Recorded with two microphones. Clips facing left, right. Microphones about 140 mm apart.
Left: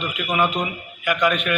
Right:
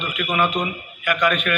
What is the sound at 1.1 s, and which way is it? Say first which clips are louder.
Speech: even; 25° left (ahead or behind).